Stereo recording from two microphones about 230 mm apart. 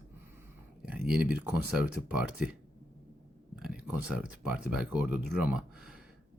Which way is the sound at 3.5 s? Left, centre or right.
Centre.